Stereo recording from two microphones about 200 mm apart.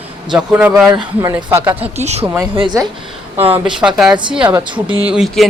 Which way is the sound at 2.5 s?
20° right (ahead or behind).